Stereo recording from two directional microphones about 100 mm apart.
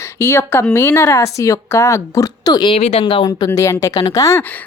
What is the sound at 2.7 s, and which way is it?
Speech, 90° left.